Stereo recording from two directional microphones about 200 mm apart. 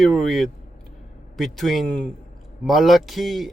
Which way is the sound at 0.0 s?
Centre (ahead or behind).